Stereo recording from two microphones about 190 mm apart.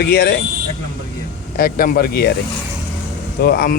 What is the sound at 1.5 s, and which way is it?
Speech, 50° left (ahead or behind).